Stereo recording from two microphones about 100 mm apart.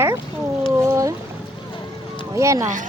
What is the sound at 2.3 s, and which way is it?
Speech, 30° right (ahead or behind).